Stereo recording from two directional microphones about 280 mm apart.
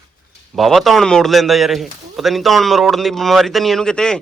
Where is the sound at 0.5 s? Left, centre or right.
Centre.